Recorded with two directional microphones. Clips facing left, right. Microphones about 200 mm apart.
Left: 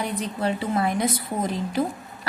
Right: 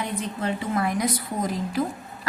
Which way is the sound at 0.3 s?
30° left (ahead or behind).